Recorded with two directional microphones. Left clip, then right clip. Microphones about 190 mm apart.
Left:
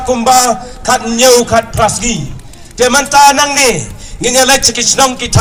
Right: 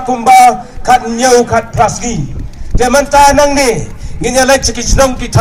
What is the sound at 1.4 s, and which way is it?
Speech, 40° right (ahead or behind).